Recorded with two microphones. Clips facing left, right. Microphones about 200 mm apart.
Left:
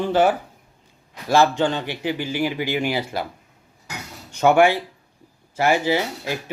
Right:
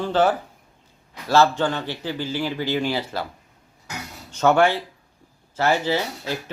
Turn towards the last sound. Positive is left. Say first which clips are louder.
# left 1 dB
turn(degrees=15)  # may be behind; listen again after turning